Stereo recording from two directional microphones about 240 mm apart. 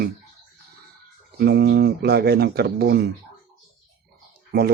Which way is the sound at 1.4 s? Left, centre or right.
Right.